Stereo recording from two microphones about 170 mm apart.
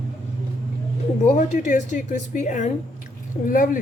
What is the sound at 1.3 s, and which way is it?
A woman's voice, 45° left (ahead or behind).